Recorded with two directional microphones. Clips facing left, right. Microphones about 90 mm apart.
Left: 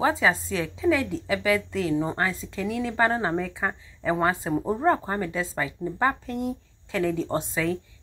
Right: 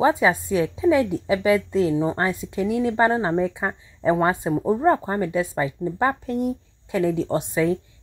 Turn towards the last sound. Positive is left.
turn(degrees=-20)  # may be behind; listen again after turning